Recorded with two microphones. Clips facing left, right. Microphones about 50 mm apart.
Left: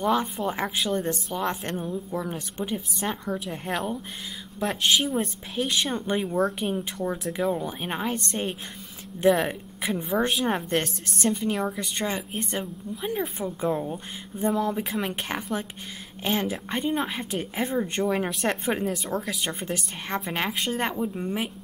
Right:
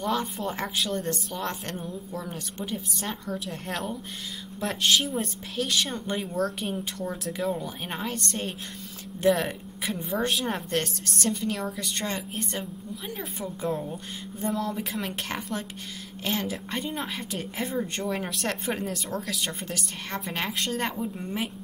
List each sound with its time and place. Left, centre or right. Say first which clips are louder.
0.0 s a woman's voice: left 4 dB; centre
18.1 s a woman's voice: left 4 dB; centre
19.6 s a woman's voice: left 3 dB; left
20.3 s a woman's voice: left 1 dB; centre